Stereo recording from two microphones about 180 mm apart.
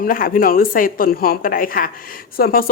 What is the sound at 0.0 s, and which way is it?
Speech, 50° left (ahead or behind).